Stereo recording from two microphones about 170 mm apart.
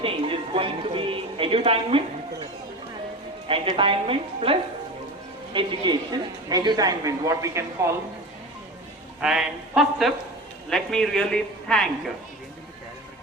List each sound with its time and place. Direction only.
0.0 s speech: 30° right (ahead or behind)
3.4 s a woman's voice: 30° right (ahead or behind)
5.5 s a woman's voice: 25° right (ahead or behind)
9.2 s a man's voice: 5° right (ahead or behind)